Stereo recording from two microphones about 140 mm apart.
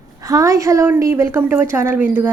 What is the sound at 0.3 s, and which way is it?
A woman's voice, 25° right (ahead or behind).